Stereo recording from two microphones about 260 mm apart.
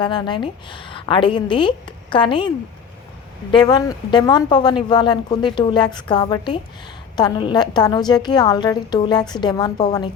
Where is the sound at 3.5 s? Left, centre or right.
Centre.